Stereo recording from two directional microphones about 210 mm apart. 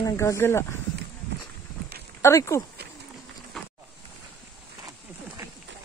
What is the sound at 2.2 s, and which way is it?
Speech, 15° left (ahead or behind).